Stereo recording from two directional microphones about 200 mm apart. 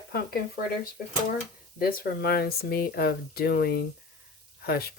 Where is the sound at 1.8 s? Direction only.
50° left (ahead or behind).